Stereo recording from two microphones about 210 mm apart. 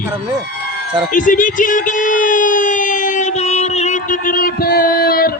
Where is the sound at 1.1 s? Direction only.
40° left (ahead or behind).